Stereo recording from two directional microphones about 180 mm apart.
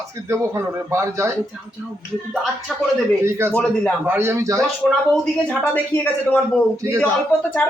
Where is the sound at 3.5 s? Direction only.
10° left (ahead or behind).